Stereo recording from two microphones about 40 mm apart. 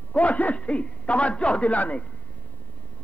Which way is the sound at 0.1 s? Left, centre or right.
Left.